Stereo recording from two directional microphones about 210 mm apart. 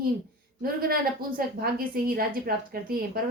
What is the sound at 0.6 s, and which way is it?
A woman's voice, 45° right (ahead or behind).